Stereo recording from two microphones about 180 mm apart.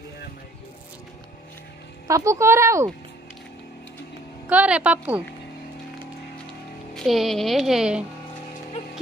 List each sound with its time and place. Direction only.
2.0 s speech: 15° right (ahead or behind)
4.5 s speech: 5° right (ahead or behind)
7.0 s speech: centre (ahead or behind)